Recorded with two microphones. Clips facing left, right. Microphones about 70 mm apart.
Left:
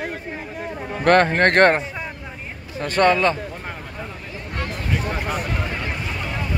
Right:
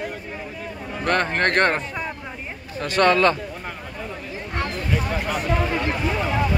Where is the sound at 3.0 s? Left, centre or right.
Centre.